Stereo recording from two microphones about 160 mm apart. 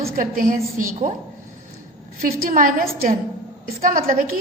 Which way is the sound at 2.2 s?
65° right (ahead or behind).